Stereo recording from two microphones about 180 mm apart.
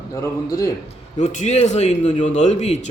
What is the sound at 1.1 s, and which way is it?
Speech, 40° left (ahead or behind).